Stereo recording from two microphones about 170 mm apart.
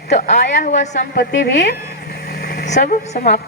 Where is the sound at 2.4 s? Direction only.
75° left (ahead or behind).